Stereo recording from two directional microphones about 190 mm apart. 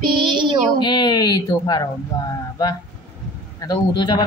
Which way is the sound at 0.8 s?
20° left (ahead or behind).